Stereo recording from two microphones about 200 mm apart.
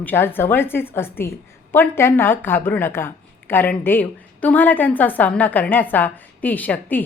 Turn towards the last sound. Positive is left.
turn(degrees=10)  # may be behind; listen again after turning